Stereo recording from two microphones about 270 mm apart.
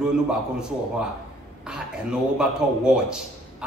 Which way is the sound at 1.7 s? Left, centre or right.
Centre.